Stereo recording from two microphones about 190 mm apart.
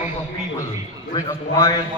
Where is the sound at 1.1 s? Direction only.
15° left (ahead or behind).